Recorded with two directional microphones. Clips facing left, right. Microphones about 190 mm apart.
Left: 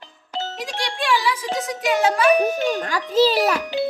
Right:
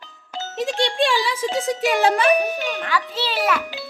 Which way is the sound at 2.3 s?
45° left (ahead or behind).